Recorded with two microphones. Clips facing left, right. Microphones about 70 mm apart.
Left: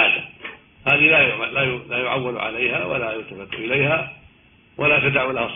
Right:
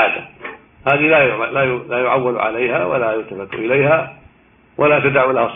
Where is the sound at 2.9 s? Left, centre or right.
Right.